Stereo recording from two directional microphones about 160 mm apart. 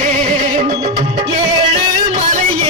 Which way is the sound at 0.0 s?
50° right (ahead or behind).